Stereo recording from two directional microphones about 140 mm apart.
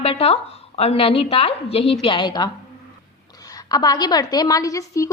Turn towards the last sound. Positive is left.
turn(degrees=25)  # may be behind; listen again after turning